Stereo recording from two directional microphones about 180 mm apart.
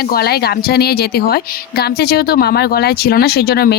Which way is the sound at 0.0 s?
60° left (ahead or behind).